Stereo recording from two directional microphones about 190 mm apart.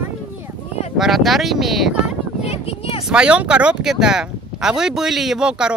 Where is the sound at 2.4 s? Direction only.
30° left (ahead or behind).